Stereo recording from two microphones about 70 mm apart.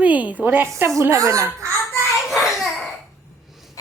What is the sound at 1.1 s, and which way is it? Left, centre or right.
Speech, right.